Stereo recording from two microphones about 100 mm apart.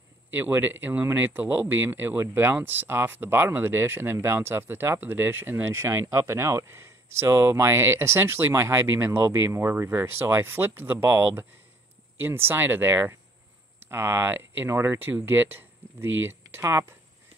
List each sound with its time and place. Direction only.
0.3 s speech: 20° right (ahead or behind)